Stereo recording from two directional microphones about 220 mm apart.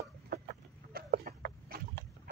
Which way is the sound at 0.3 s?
40° right (ahead or behind).